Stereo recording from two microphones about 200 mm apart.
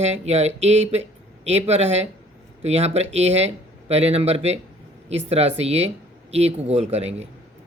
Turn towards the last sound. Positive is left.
turn(degrees=-30)  # may be behind; listen again after turning